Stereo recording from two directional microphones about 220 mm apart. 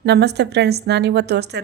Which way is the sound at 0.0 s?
50° right (ahead or behind).